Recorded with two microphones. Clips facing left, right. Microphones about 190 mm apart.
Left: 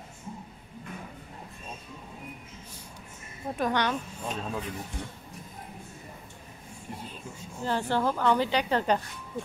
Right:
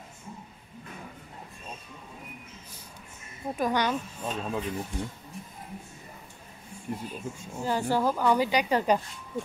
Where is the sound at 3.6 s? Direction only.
10° right (ahead or behind).